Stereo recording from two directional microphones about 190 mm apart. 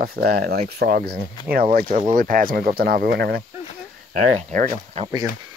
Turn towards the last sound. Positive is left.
turn(degrees=-20)  # may be behind; listen again after turning